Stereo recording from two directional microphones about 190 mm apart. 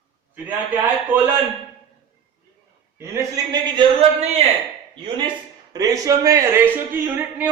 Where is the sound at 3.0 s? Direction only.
20° right (ahead or behind).